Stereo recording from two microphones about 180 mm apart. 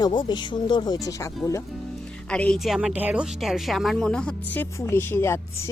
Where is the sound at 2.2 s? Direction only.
5° left (ahead or behind).